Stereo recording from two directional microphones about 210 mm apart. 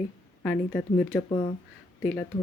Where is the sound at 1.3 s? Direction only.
25° left (ahead or behind).